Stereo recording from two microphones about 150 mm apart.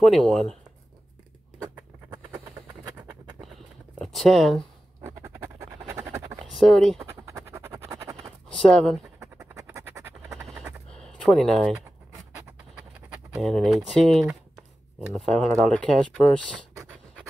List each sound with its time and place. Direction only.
0.0 s speech: centre (ahead or behind)
4.0 s speech: centre (ahead or behind)
5.0 s scratch: 15° right (ahead or behind)
6.5 s speech: centre (ahead or behind)
7.2 s scratch: 20° right (ahead or behind)
8.5 s speech: 5° left (ahead or behind)
9.2 s a sound: 20° right (ahead or behind)
10.4 s machine gun: 5° right (ahead or behind)
11.0 s a sound: 5° left (ahead or behind)
13.4 s speech: centre (ahead or behind)